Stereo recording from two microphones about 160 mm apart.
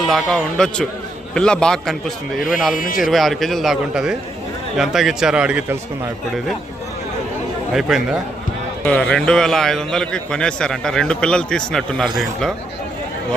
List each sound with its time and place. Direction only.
0.0 s a man's voice: centre (ahead or behind)
2.7 s speech: 60° left (ahead or behind)
3.0 s a man's voice: centre (ahead or behind)
7.7 s a man's voice: centre (ahead or behind)